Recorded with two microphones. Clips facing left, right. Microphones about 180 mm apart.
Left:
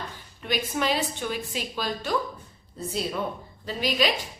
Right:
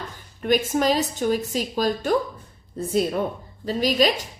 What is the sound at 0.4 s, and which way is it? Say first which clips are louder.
A woman's voice: right 7 dB; 45° right (ahead or behind).